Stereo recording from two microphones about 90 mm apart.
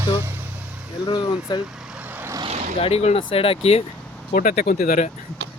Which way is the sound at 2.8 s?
80° left.